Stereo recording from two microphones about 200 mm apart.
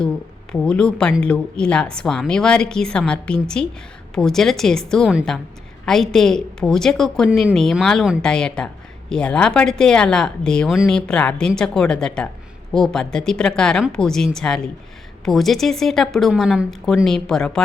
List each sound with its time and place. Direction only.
0.5 s a woman's voice: 5° left (ahead or behind)